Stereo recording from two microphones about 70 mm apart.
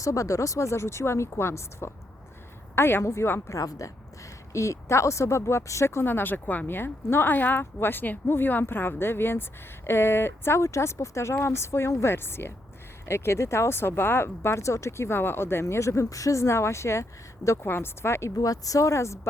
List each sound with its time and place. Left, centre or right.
0.0 s speech: left
3.5 s speech: left
17.6 s speech: left
18.3 s speech: left